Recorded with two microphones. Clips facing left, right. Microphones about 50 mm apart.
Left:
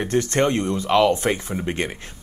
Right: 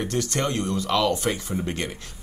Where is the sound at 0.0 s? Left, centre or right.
Left.